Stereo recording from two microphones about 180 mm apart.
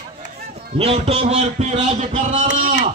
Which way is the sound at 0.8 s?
30° right (ahead or behind).